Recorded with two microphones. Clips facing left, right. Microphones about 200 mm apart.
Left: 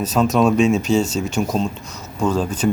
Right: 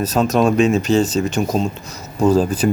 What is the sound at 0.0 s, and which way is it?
Speech, centre (ahead or behind).